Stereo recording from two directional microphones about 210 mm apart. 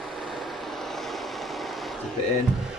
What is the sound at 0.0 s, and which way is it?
Vehicle, centre (ahead or behind).